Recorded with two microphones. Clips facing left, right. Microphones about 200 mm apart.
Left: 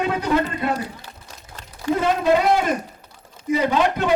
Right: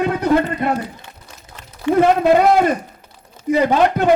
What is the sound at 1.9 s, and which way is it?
Speech, 60° right (ahead or behind).